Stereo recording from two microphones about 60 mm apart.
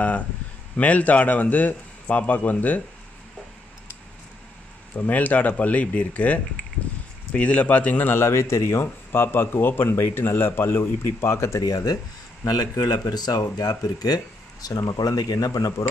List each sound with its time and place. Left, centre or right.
0.7 s a man's voice: left
4.9 s a man's voice: left
11.6 s speech: left